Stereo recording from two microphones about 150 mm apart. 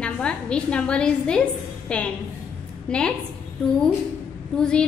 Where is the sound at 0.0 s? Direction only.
5° left (ahead or behind).